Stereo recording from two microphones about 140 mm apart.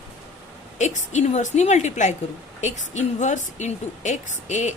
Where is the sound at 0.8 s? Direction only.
55° left (ahead or behind).